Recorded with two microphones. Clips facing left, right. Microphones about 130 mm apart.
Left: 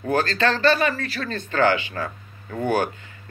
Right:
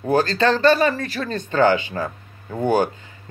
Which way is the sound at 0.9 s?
15° right (ahead or behind).